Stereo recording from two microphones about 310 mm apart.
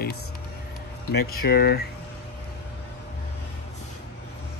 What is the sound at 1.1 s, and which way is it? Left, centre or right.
Speech, left.